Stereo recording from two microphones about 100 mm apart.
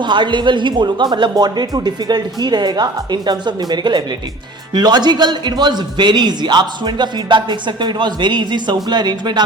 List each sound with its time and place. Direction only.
0.0 s speech: 50° right (ahead or behind)